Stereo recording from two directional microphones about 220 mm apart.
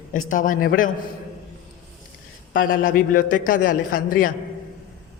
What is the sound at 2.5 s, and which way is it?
A man's voice, 40° left (ahead or behind).